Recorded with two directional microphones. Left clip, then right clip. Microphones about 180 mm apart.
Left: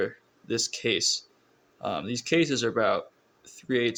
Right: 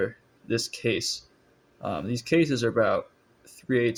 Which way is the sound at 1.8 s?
30° left (ahead or behind).